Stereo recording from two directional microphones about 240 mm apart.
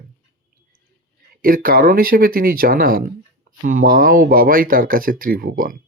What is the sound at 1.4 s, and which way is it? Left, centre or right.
Speech, right.